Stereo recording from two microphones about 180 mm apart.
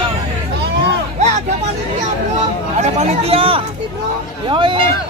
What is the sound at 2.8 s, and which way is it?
Speech, 35° right (ahead or behind).